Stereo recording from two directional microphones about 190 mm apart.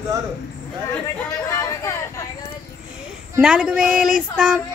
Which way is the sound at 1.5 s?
15° left (ahead or behind).